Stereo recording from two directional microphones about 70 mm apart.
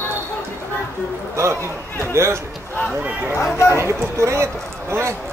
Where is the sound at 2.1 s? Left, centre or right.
Right.